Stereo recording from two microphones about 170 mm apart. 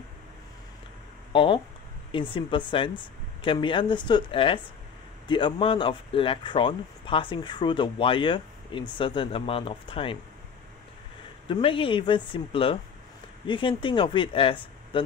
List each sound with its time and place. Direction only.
1.3 s speech: 30° left (ahead or behind)
11.4 s speech: 30° left (ahead or behind)